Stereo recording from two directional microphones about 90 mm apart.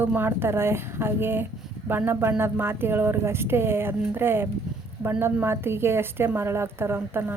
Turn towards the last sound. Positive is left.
turn(degrees=-25)  # may be behind; listen again after turning